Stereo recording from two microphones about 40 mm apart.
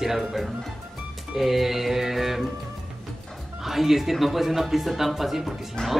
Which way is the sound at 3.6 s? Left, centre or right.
Centre.